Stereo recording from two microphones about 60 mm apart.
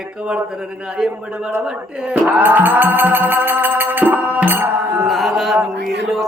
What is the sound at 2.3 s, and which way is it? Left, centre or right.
Music, right.